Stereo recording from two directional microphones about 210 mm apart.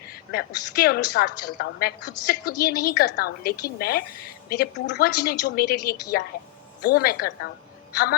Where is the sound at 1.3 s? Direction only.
90° left.